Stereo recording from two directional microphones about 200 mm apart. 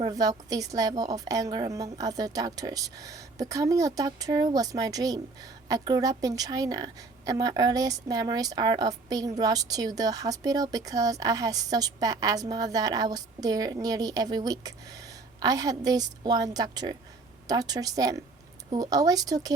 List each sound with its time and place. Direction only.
0.0 s a woman's voice: 20° right (ahead or behind)